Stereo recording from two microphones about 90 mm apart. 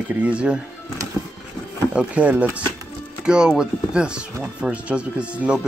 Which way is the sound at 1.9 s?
15° right (ahead or behind).